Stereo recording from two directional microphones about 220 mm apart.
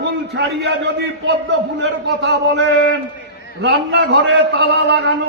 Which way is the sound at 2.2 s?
55° right (ahead or behind).